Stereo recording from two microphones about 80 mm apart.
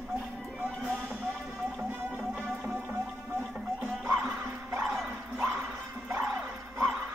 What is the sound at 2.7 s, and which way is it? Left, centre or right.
Music, right.